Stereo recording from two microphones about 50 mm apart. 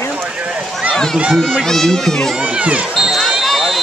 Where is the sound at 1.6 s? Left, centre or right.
Centre.